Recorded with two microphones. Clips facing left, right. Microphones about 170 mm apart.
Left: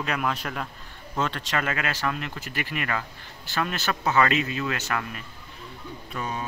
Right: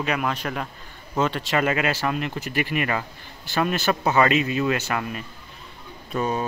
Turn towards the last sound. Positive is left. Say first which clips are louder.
# right 7 dB
turn(degrees=-35)  # may be behind; listen again after turning